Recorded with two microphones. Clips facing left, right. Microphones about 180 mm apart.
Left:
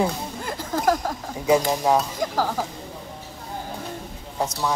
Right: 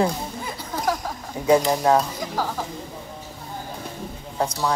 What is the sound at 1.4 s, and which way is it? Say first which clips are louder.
Speech: right 2 dB; centre (ahead or behind).